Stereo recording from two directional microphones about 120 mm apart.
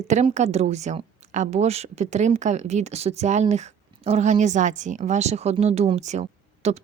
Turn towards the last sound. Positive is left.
turn(degrees=-70)  # may be behind; listen again after turning